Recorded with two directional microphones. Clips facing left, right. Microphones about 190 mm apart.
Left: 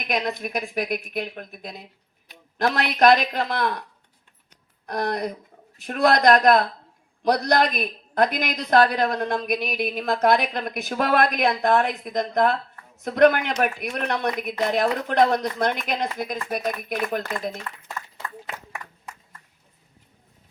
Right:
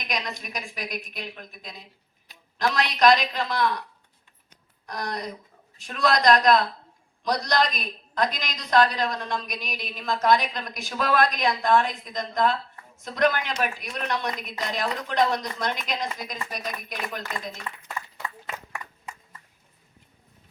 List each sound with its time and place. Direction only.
0.1 s speech: 55° left (ahead or behind)
4.9 s speech: 55° left (ahead or behind)